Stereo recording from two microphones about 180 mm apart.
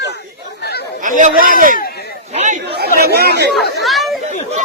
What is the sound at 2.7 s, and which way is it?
Speech, 60° right (ahead or behind).